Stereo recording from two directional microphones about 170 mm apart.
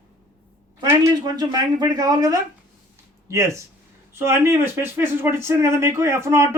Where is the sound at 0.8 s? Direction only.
20° right (ahead or behind).